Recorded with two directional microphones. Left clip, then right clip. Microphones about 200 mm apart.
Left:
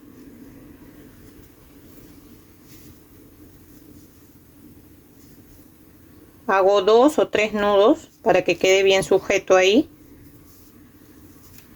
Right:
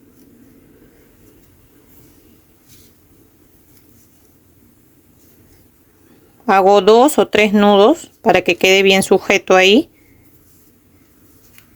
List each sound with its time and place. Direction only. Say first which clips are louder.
6.4 s speech: right 7 dB; 60° right (ahead or behind)